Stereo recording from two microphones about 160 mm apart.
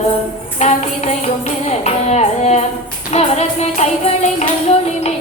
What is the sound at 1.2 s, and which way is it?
Music, 45° left (ahead or behind).